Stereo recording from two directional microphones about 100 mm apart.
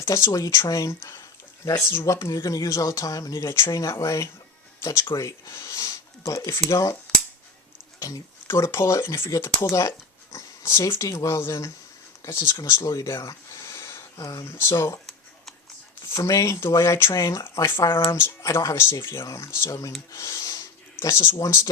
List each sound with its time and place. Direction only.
0.0 s speech: 30° left (ahead or behind)
7.9 s speech: 35° left (ahead or behind)
16.1 s speech: 30° left (ahead or behind)